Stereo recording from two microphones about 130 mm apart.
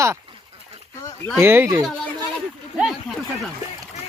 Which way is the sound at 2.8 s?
Centre (ahead or behind).